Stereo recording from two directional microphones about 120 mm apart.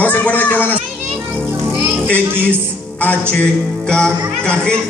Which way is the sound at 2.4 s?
10° left (ahead or behind).